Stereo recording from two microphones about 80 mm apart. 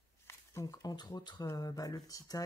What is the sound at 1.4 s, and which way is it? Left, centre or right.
Speech, left.